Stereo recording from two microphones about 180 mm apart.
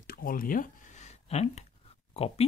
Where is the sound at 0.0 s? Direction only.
55° left (ahead or behind); by 1.6 s 35° left (ahead or behind).